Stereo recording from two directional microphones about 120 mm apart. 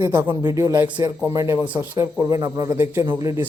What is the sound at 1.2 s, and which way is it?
Speech, 25° right (ahead or behind).